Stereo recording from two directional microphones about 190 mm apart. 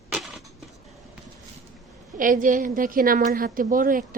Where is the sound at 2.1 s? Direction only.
45° right (ahead or behind).